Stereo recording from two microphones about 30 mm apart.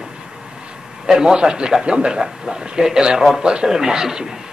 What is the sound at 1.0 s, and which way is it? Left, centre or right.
A man's voice, right.